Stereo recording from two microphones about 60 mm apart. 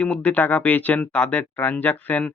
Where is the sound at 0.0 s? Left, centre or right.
Left.